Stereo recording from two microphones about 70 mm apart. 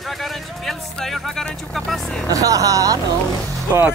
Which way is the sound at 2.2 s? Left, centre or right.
Right.